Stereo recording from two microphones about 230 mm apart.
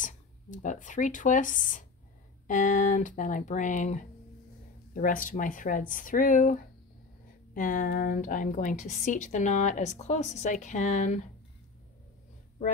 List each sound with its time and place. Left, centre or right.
0.0 s a woman's voice: left